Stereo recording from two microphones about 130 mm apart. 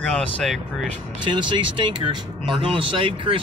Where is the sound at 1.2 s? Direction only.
35° right (ahead or behind).